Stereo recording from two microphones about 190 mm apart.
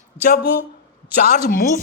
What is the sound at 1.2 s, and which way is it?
Speech, 45° left (ahead or behind).